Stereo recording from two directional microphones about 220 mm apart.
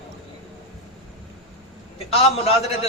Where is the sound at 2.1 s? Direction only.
25° left (ahead or behind).